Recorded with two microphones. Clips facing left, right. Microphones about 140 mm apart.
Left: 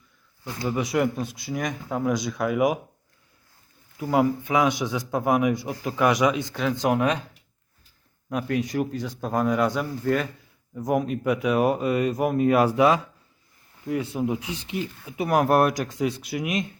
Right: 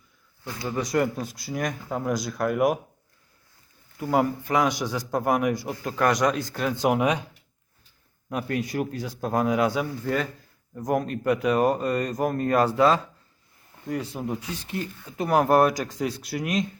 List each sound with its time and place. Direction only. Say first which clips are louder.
0.4 s speech: left 3 dB; 15° left (ahead or behind)
0.8 s speech: even; 5° left (ahead or behind)
3.9 s speech: left 1 dB; centre (ahead or behind)
8.3 s speech: left 2 dB; centre (ahead or behind)
14.7 s speech: left 2 dB; 15° left (ahead or behind)